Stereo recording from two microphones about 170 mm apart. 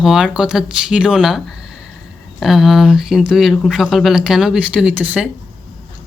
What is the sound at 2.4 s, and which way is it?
Speech, centre (ahead or behind).